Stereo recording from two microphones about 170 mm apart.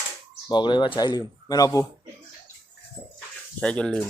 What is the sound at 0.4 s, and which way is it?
Speech, 25° left (ahead or behind).